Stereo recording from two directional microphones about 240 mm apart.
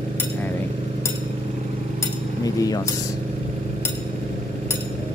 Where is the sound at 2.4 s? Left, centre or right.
Centre.